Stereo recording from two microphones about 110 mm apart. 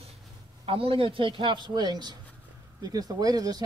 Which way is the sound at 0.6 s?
55° right (ahead or behind).